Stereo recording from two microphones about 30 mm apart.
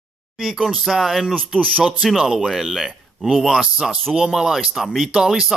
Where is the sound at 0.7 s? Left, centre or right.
Centre.